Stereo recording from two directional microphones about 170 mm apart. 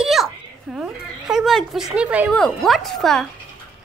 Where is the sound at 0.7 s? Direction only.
5° right (ahead or behind).